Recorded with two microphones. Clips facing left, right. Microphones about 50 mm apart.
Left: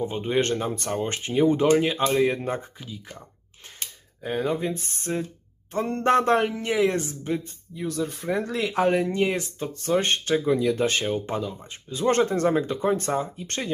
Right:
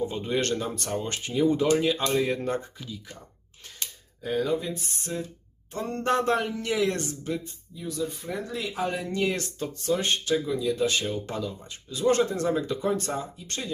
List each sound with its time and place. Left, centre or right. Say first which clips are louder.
0.0 s speech: left 3 dB; left
6.4 s speech: left 4 dB; left
7.8 s speech: left 3 dB; left
8.3 s speech: left 6 dB; left
9.0 s speech: left 3 dB; left
9.8 s speech: left 3 dB; left